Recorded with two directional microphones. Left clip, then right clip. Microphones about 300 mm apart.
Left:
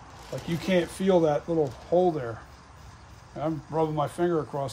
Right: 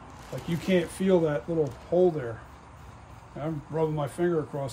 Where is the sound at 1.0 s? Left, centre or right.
Left.